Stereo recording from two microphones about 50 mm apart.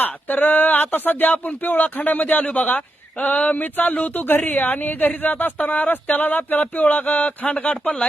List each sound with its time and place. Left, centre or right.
0.0 s speech: left
5.9 s speech: left